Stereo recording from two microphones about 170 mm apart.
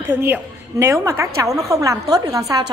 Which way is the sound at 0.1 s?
10° right (ahead or behind).